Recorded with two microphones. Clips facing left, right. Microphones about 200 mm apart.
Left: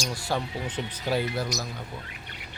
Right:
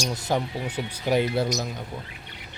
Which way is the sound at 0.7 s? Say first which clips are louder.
Right 5 dB; 10° right (ahead or behind).